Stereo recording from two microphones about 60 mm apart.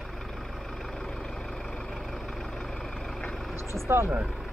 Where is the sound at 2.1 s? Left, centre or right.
Centre.